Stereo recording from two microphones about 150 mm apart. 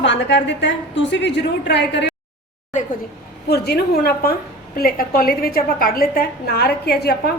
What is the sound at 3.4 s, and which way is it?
A woman's voice, 90° left.